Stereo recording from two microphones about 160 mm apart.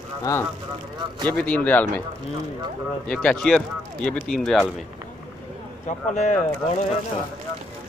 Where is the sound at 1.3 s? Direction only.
10° left (ahead or behind).